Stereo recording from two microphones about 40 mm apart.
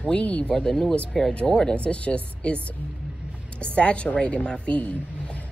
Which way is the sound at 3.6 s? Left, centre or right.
Left.